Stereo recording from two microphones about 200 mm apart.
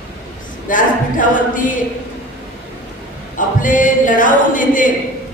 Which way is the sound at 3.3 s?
40° left (ahead or behind).